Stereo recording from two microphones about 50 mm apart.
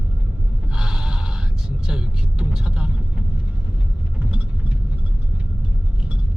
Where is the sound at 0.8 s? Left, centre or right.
Centre.